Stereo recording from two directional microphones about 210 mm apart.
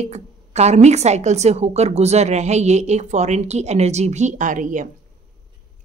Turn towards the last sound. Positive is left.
turn(degrees=-40)  # may be behind; listen again after turning